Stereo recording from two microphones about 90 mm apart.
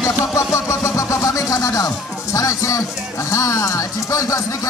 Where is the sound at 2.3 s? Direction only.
35° left (ahead or behind).